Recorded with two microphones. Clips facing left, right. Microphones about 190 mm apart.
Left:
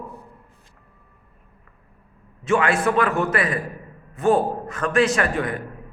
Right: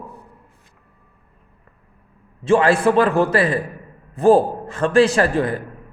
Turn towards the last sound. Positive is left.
turn(degrees=-30)  # may be behind; listen again after turning